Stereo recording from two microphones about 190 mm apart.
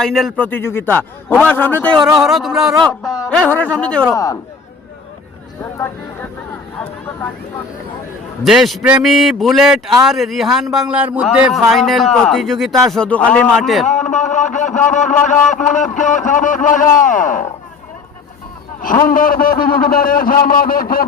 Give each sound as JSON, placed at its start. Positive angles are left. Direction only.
{"t": 0.0, "sound": "a man's voice", "side_deg": 0}
{"t": 4.1, "sound": "a man's voice", "side_deg": 20}
{"t": 8.4, "sound": "a man's voice", "side_deg": 0}
{"t": 13.8, "sound": "a man's voice", "side_deg": 40}
{"t": 14.9, "sound": "a sound", "side_deg": 40}
{"t": 19.0, "sound": "a sound", "side_deg": 45}